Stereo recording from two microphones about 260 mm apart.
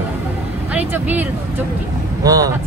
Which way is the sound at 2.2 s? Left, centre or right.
Centre.